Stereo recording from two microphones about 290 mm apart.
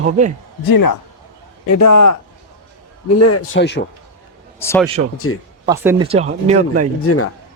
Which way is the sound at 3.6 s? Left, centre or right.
Left.